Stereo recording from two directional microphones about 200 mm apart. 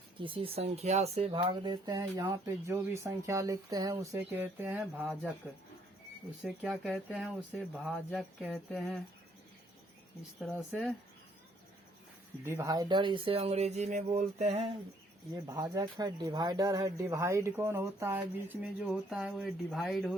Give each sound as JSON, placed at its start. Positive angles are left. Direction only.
{"t": 0.2, "sound": "speech", "side_deg": -25}
{"t": 6.4, "sound": "speech", "side_deg": 0}
{"t": 10.4, "sound": "speech", "side_deg": 0}
{"t": 12.5, "sound": "speech", "side_deg": -15}
{"t": 15.4, "sound": "speech", "side_deg": -20}